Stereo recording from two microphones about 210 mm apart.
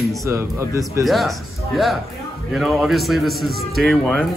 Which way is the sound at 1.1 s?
Centre (ahead or behind).